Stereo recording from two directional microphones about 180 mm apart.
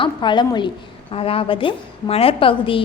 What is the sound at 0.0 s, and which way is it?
A woman's voice, 25° left (ahead or behind).